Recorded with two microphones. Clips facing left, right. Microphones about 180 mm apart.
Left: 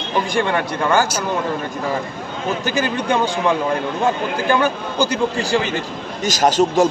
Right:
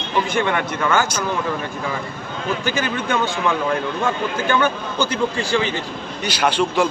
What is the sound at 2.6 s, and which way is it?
A man's voice, 35° left (ahead or behind).